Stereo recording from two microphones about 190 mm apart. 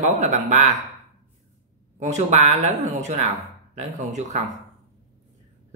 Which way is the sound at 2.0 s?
35° right (ahead or behind).